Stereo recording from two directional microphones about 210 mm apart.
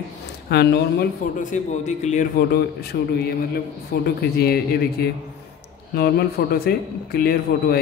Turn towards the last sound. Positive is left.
turn(degrees=45)  # may be behind; listen again after turning